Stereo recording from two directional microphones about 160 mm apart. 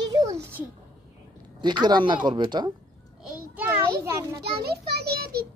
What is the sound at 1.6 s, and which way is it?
Speech, 25° right (ahead or behind).